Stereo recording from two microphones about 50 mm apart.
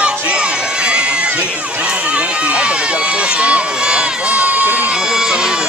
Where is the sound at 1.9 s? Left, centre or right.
Right.